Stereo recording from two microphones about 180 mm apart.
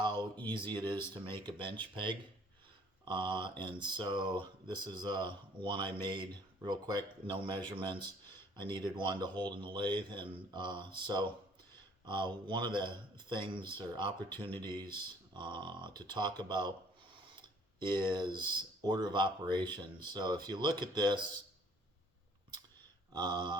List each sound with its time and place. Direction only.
0.0 s a sound: 25° right (ahead or behind)
0.5 s speech: 25° right (ahead or behind)
17.7 s speech: 25° right (ahead or behind)
23.2 s speech: 25° right (ahead or behind)